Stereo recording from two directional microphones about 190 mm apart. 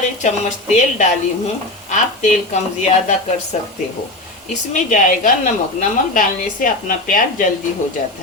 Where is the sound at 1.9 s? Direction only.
40° left (ahead or behind).